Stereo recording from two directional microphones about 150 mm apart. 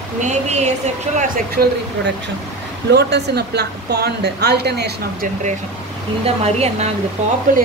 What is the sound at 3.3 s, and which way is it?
A woman's voice, 90° right.